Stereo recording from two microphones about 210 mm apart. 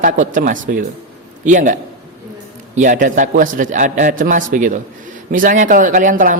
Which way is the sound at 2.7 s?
40° right (ahead or behind).